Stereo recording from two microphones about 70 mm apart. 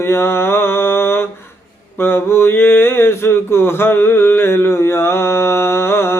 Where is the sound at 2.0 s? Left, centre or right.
Left.